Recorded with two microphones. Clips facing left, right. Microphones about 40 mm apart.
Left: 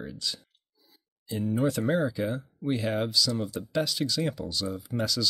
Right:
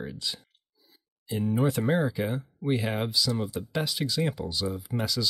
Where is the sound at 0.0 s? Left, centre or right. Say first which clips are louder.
Right 1 dB; centre.